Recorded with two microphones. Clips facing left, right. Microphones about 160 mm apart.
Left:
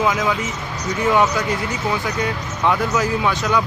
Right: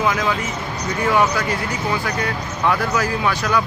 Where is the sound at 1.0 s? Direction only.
20° left (ahead or behind).